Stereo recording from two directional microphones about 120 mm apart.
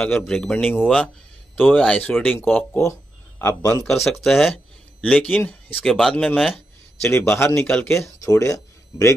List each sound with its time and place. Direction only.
0.0 s speech: 5° left (ahead or behind); by 3.8 s 20° left (ahead or behind)
4.0 s speech: centre (ahead or behind)
5.0 s speech: 10° left (ahead or behind)
5.9 s speech: centre (ahead or behind)
7.0 s a man's voice: 20° left (ahead or behind)